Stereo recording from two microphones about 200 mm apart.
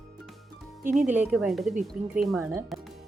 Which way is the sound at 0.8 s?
40° right (ahead or behind).